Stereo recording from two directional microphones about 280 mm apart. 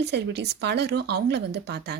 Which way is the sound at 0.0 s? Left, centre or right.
Right.